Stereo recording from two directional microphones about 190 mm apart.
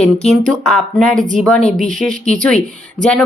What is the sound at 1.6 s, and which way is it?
Speech, 40° right (ahead or behind).